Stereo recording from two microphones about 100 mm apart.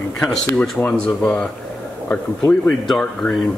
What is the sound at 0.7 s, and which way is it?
Speech, 15° left (ahead or behind).